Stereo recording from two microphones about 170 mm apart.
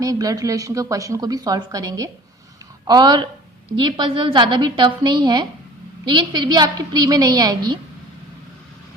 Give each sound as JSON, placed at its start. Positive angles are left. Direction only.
{"t": 0.0, "sound": "a woman's voice", "side_deg": -20}